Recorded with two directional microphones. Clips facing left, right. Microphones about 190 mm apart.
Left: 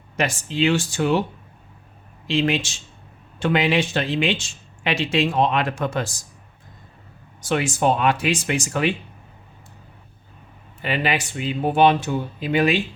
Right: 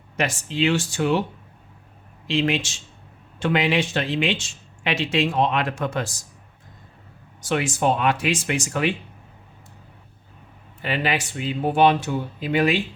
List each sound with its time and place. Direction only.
0.2 s speech: 40° left (ahead or behind)
2.2 s speech: 35° left (ahead or behind)
7.4 s speech: 30° left (ahead or behind)
10.8 s speech: 20° left (ahead or behind)